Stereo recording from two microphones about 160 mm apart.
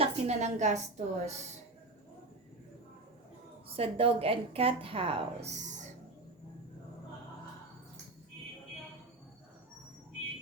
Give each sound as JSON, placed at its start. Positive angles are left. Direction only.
{"t": 0.0, "sound": "a woman's voice", "side_deg": -45}
{"t": 3.8, "sound": "a woman's voice", "side_deg": -35}